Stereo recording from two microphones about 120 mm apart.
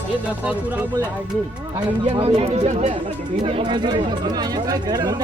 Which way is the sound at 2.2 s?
55° right (ahead or behind).